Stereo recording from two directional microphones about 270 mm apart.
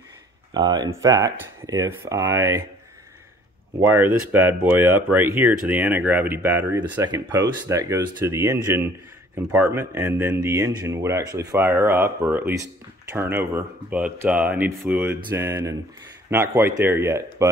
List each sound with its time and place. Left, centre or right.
0.6 s speech: centre
3.9 s speech: centre